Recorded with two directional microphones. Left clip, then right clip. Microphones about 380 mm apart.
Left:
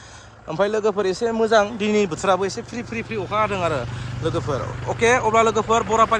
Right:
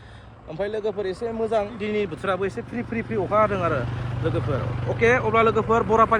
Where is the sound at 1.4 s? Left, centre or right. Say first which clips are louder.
Left 7 dB; left.